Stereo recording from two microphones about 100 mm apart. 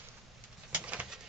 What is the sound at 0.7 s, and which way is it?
Bird, 15° right (ahead or behind).